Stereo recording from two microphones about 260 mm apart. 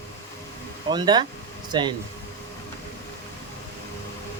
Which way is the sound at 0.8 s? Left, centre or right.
Centre.